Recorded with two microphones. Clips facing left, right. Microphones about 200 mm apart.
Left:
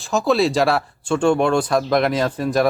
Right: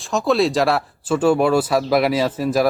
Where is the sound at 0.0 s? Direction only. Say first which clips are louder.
Even; centre (ahead or behind).